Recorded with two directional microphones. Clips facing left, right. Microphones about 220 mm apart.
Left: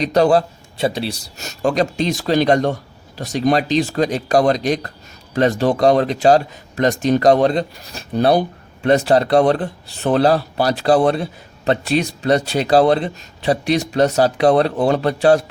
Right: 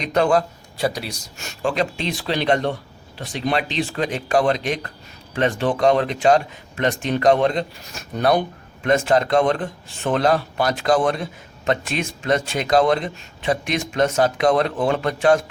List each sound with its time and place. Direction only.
0.0 s speech: 35° left (ahead or behind)